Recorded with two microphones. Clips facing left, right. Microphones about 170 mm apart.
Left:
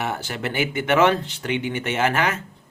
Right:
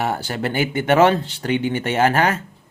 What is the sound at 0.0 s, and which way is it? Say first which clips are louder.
Speech: right 4 dB; 35° right (ahead or behind).